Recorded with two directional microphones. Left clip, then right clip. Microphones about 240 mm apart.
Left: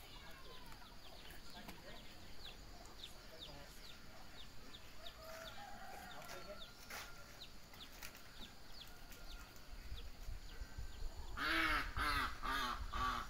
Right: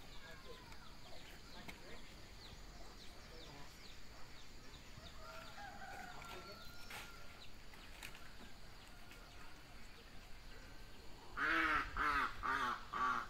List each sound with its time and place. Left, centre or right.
11.3 s crow: left